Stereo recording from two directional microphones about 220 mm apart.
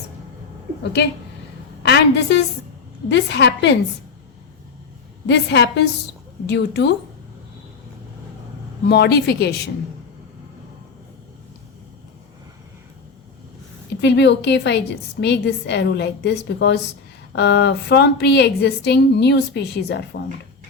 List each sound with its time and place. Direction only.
1.8 s speech: 50° left (ahead or behind)
5.2 s speech: 50° left (ahead or behind)
8.9 s speech: 50° left (ahead or behind)
14.0 s speech: 50° left (ahead or behind)